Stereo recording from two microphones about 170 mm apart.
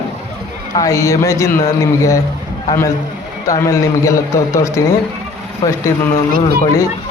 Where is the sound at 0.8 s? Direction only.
20° left (ahead or behind).